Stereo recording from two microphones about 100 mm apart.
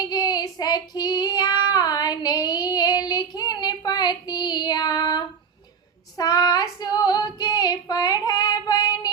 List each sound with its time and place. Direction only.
0.0 s child singing: 40° left (ahead or behind)
6.1 s female singing: 40° left (ahead or behind)